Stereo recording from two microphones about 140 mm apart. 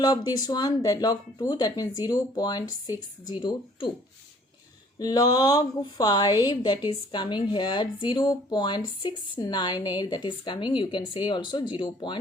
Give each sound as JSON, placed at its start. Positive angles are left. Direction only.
{"t": 0.0, "sound": "a woman's voice", "side_deg": 30}
{"t": 4.9, "sound": "a woman's voice", "side_deg": 30}